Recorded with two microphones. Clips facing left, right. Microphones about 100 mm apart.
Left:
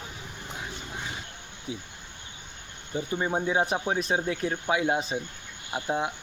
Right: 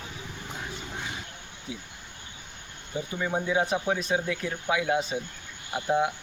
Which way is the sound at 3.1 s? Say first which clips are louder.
Left 1 dB; 30° left (ahead or behind).